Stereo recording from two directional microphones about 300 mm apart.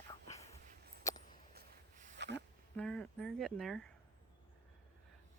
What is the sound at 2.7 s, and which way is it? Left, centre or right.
Speech, centre.